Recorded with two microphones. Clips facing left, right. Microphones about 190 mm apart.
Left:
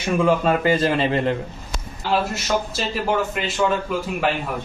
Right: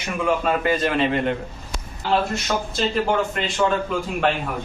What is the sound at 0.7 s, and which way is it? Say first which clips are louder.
Speech: even; 30° left (ahead or behind).